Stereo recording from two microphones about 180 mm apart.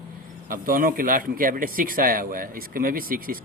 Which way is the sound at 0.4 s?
50° right (ahead or behind).